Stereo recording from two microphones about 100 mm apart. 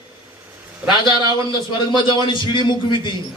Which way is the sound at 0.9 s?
50° left (ahead or behind).